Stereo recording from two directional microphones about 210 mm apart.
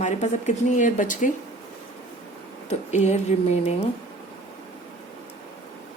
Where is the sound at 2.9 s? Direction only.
35° left (ahead or behind).